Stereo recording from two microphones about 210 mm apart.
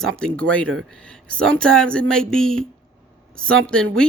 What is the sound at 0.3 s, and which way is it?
Speech, 5° left (ahead or behind).